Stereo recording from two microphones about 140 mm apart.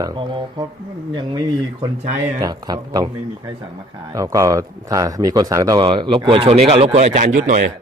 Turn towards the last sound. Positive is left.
turn(degrees=-65)  # may be behind; listen again after turning